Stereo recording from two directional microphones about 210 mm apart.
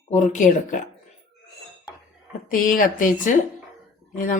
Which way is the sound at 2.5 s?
40° left (ahead or behind).